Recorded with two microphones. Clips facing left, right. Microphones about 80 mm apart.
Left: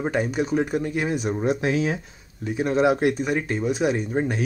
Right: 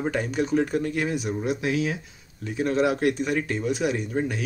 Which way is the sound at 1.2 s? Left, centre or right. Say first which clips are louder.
Left 3 dB; left.